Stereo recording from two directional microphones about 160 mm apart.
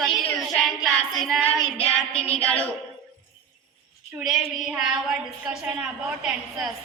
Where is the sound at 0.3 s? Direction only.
Centre (ahead or behind).